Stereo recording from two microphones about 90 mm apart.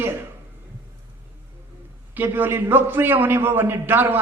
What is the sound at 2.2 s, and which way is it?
A man's voice, 25° right (ahead or behind).